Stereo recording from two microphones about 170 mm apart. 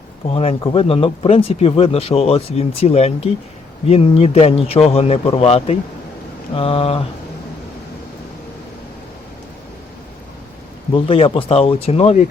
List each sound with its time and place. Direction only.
0.6 s speech: 30° left (ahead or behind)
10.9 s speech: 30° left (ahead or behind)